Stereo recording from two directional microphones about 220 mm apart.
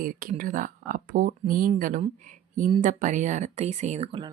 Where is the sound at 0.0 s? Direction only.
40° right (ahead or behind).